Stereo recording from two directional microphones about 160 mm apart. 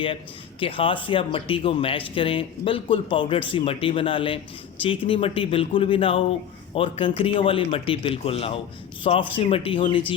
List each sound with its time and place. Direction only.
0.6 s speech: 35° left (ahead or behind)